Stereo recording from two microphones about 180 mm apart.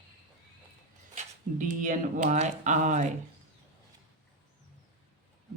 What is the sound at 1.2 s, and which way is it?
A man's voice, 45° right (ahead or behind).